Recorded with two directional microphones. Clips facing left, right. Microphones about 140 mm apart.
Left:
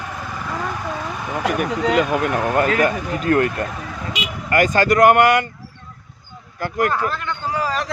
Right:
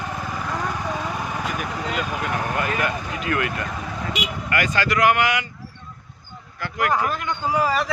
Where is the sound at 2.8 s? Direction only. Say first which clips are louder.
Left 6 dB; 40° left (ahead or behind).